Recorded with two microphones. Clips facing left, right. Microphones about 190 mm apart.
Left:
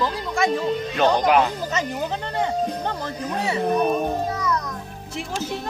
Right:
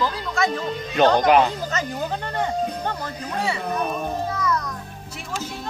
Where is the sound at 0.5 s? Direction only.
5° left (ahead or behind).